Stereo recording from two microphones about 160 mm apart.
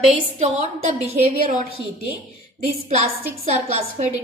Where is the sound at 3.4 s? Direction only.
45° right (ahead or behind).